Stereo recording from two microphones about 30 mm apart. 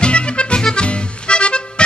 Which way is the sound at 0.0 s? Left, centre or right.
Left.